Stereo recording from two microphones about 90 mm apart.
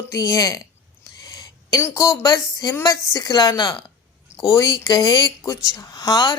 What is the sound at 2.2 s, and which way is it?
Speech, 45° left (ahead or behind).